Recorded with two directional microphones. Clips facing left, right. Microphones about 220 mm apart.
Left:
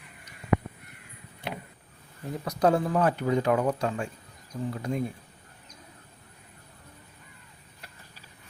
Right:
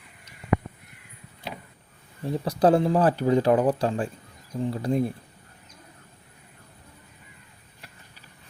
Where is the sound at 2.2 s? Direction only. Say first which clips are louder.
Right 4 dB; 30° right (ahead or behind).